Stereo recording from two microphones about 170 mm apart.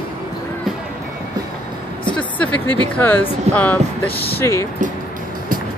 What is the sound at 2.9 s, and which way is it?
Speech, 10° left (ahead or behind).